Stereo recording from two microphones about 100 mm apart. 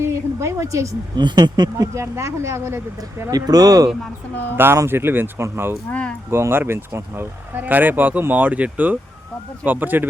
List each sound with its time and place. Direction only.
0.0 s a sound: 30° right (ahead or behind)
1.1 s speech: 45° right (ahead or behind)
2.0 s speech: 30° right (ahead or behind)
3.3 s speech: 40° right (ahead or behind)
4.5 s speech: 20° right (ahead or behind)
5.9 s speech: 10° left (ahead or behind)
6.3 s speech: 25° right (ahead or behind)